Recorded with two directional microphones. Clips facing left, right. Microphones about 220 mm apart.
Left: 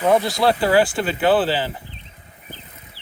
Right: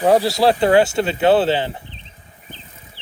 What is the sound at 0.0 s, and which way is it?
Speech, 35° right (ahead or behind).